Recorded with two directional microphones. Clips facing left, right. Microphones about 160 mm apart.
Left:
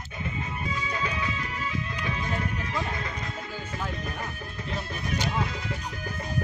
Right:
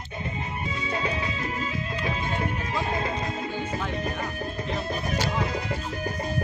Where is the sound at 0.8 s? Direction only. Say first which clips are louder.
Right 4 dB; 30° right (ahead or behind).